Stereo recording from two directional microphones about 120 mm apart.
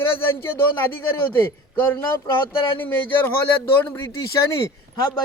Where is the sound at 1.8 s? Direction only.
20° left (ahead or behind).